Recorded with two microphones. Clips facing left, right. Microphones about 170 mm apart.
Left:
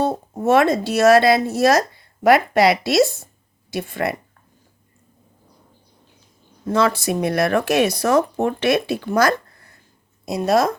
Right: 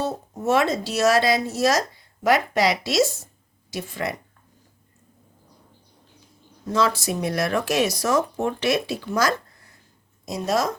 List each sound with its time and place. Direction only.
0.0 s speech: 55° left (ahead or behind)
6.7 s speech: 60° left (ahead or behind)